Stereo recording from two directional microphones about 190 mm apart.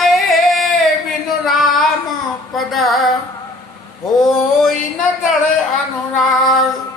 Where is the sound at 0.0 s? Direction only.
Centre (ahead or behind).